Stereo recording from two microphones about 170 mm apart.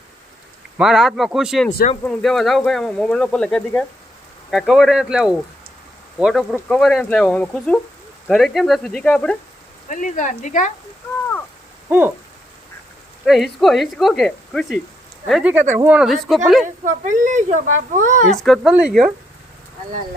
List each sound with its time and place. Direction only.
0.8 s speech: 5° right (ahead or behind)
9.9 s speech: 50° left (ahead or behind)
11.9 s owl: 10° right (ahead or behind)
13.2 s speech: centre (ahead or behind)
16.8 s speech: 45° right (ahead or behind)
18.3 s speech: centre (ahead or behind)